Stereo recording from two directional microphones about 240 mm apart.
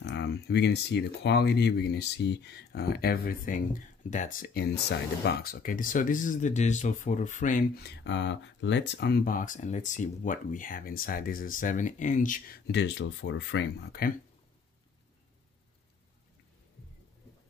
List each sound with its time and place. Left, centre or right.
0.0 s speech: left
12.7 s speech: left